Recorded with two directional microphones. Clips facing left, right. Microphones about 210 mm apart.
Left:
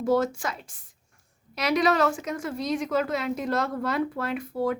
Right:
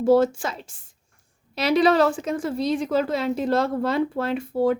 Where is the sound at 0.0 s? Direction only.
30° right (ahead or behind).